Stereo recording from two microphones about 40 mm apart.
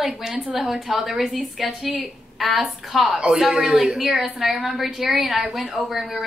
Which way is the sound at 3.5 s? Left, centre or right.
Centre.